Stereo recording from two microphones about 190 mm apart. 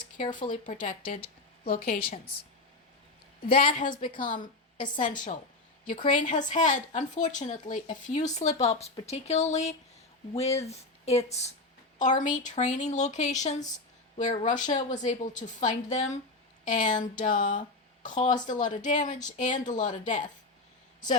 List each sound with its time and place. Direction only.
0.6 s a woman's voice: 45° left (ahead or behind)
3.5 s a woman's voice: 45° left (ahead or behind)